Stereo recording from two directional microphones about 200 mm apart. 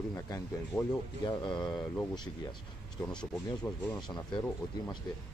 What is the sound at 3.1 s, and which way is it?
Speech, 5° left (ahead or behind).